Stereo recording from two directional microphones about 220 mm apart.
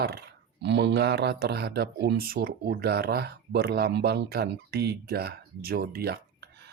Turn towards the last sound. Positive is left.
turn(degrees=-50)  # may be behind; listen again after turning